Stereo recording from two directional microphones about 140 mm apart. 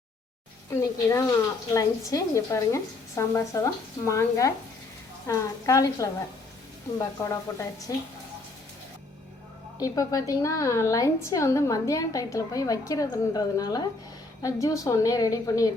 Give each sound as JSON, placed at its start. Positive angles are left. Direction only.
{"t": 0.7, "sound": "a woman's voice", "side_deg": 20}
{"t": 9.7, "sound": "a woman's voice", "side_deg": 25}